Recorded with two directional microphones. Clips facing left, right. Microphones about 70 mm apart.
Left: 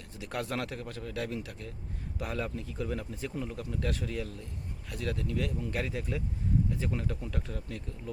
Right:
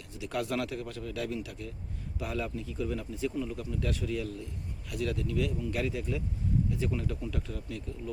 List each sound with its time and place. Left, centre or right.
0.2 s speech: left